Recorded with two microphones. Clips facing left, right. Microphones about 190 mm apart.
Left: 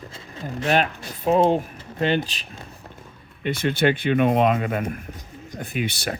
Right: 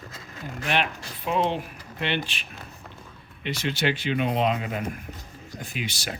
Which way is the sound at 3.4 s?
50° left (ahead or behind).